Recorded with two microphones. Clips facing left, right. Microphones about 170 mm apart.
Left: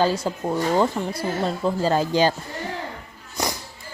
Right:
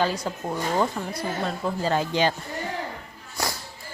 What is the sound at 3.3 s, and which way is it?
Music, 20° left (ahead or behind).